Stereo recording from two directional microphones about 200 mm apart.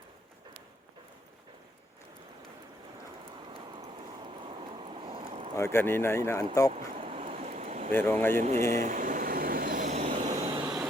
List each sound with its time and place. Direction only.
3.5 s vehicle: 25° right (ahead or behind)
5.5 s speech: 10° left (ahead or behind)
6.7 s a sound: 30° right (ahead or behind)
7.9 s speech: 10° left (ahead or behind)
8.4 s speech: 40° right (ahead or behind)
8.7 s vehicle: 40° right (ahead or behind)